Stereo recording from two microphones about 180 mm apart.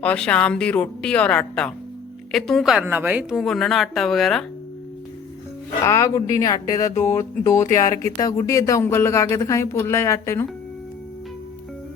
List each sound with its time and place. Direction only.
0.0 s a woman's voice: 5° left (ahead or behind)
5.8 s speech: 20° left (ahead or behind)